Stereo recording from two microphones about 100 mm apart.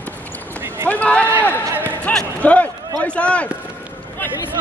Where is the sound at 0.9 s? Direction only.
15° left (ahead or behind).